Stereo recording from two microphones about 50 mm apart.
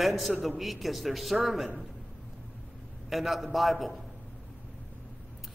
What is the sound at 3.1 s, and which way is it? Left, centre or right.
Speech, centre.